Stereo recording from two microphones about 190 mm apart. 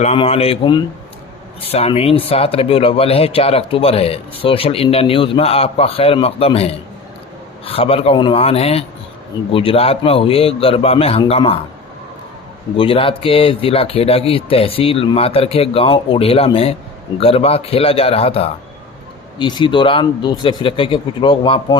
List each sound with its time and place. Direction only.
0.0 s speech: 35° left (ahead or behind)
12.7 s speech: 30° left (ahead or behind)